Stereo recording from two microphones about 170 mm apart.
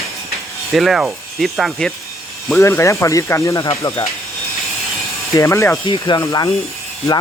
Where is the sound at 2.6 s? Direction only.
15° left (ahead or behind).